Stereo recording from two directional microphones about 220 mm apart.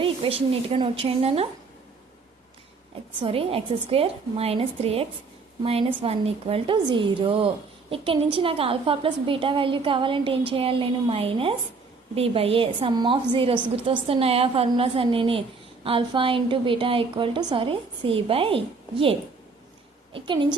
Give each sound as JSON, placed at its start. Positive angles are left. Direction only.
{"t": 0.0, "sound": "speech", "side_deg": -25}
{"t": 3.2, "sound": "speech", "side_deg": -25}
{"t": 20.1, "sound": "speech", "side_deg": -20}